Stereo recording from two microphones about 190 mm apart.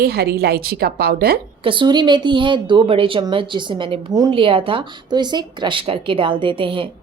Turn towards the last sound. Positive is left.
turn(degrees=-25)  # may be behind; listen again after turning